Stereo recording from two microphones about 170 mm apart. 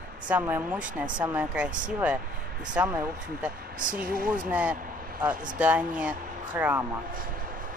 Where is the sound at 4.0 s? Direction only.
55° right (ahead or behind).